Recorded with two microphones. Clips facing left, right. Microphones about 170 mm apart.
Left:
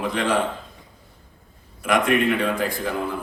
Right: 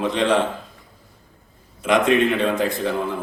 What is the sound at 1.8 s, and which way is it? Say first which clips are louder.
A man's voice: right 3 dB; 20° right (ahead or behind).